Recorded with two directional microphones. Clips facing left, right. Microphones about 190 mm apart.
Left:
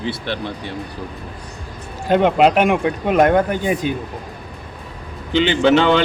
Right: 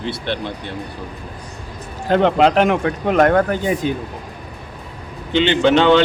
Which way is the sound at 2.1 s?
15° left (ahead or behind).